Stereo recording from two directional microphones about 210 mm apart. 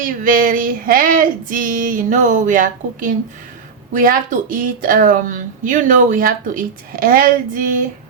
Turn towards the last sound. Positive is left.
turn(degrees=-40)  # may be behind; listen again after turning